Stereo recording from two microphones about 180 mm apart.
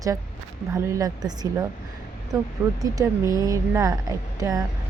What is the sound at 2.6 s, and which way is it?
Speech, 10° right (ahead or behind).